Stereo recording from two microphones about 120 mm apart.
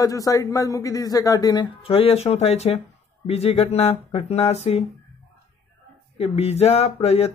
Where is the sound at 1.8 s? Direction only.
55° left (ahead or behind).